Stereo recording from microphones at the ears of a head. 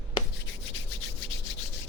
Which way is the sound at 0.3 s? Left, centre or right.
Left.